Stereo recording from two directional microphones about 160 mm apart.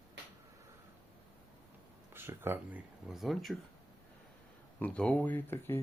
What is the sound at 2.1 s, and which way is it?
Speech, 15° right (ahead or behind).